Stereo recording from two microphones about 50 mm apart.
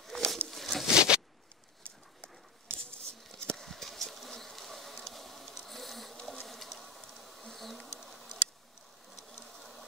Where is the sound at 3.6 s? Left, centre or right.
Centre.